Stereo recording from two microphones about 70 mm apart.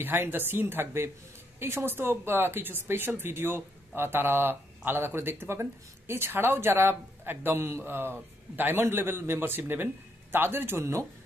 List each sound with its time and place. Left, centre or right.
0.0 s a woman's voice: right
10.8 s speech: right